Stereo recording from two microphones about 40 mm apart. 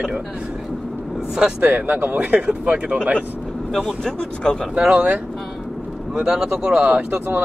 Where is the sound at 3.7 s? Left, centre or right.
Centre.